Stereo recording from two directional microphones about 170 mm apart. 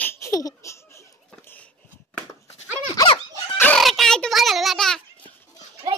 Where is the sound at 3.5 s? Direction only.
10° left (ahead or behind).